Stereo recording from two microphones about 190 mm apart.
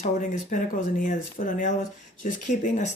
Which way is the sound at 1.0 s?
40° left (ahead or behind).